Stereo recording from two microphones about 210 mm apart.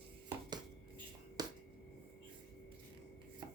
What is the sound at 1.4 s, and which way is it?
Finger snapping, 20° right (ahead or behind).